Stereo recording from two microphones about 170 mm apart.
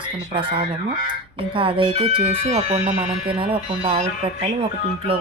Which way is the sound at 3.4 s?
35° right (ahead or behind).